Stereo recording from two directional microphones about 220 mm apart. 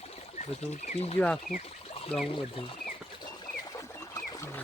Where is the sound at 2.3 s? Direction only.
25° left (ahead or behind).